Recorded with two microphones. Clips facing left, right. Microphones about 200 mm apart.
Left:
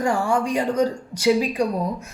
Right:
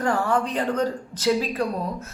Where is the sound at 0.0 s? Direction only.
10° left (ahead or behind).